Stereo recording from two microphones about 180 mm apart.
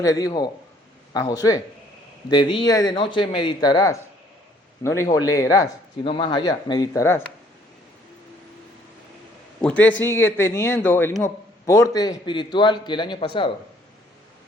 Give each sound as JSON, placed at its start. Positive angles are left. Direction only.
{"t": 0.0, "sound": "a man's voice", "side_deg": 20}
{"t": 9.6, "sound": "a man's voice", "side_deg": 5}